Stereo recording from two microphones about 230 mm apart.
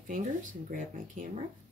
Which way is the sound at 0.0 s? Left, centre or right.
Right.